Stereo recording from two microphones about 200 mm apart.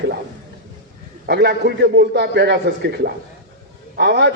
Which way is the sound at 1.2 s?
55° right (ahead or behind).